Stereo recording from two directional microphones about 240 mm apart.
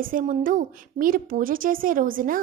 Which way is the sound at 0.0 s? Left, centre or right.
Right.